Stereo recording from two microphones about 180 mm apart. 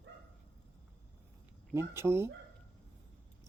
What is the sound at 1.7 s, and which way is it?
Speech, 15° right (ahead or behind).